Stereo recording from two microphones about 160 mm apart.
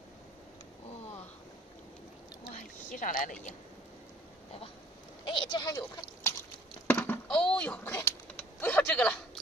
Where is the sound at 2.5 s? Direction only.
50° left (ahead or behind).